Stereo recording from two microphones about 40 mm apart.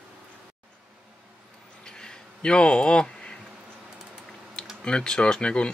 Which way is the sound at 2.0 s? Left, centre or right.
Left.